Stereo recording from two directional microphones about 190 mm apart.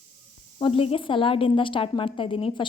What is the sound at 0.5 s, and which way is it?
Speech, 30° left (ahead or behind).